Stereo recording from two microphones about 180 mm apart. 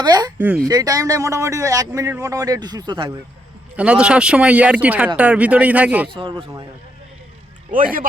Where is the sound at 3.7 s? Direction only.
5° right (ahead or behind).